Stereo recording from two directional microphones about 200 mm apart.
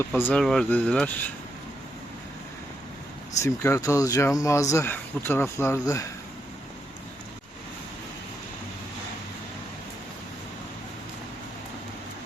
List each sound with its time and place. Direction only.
0.0 s speech: 10° left (ahead or behind)
3.4 s speech: 15° left (ahead or behind)